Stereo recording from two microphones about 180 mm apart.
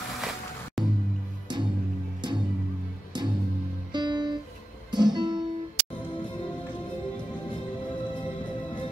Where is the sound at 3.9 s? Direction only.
25° right (ahead or behind).